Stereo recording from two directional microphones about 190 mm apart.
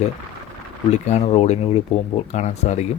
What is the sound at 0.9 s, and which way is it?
Speech, 35° left (ahead or behind).